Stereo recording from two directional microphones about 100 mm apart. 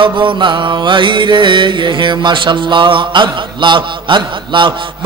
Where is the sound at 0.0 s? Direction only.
55° right (ahead or behind).